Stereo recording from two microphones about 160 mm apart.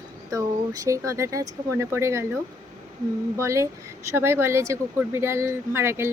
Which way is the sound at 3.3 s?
20° right (ahead or behind).